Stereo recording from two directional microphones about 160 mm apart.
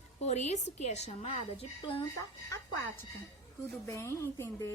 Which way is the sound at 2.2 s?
20° left (ahead or behind).